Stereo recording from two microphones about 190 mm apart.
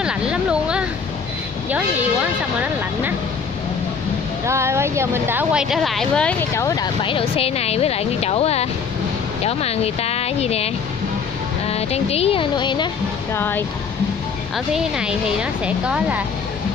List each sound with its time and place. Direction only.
0.0 s a sound: 5° right (ahead or behind)
4.5 s speech: 15° right (ahead or behind); by 6.3 s 5° left (ahead or behind)
6.5 s speech: 15° left (ahead or behind)
13.4 s speech: 10° left (ahead or behind)
14.7 s a woman's voice: 5° right (ahead or behind)